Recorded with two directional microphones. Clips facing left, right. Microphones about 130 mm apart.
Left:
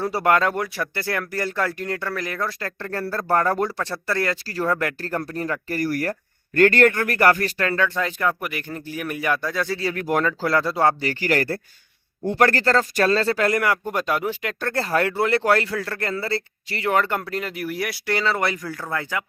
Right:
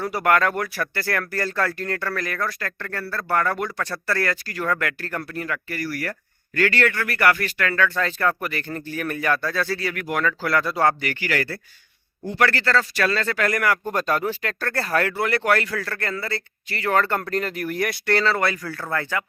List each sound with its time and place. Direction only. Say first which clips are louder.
0.0 s speech: left 1 dB; 30° left (ahead or behind)
13.9 s speech: even; 10° left (ahead or behind)